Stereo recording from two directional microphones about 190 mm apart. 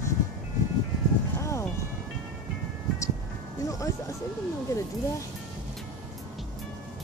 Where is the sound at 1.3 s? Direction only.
15° left (ahead or behind).